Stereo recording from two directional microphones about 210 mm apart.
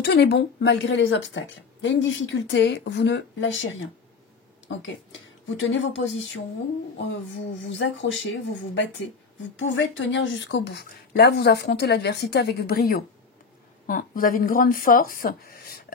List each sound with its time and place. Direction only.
0.0 s a woman's voice: 50° left (ahead or behind)
5.6 s a woman's voice: 60° left (ahead or behind); by 15.8 s 45° left (ahead or behind)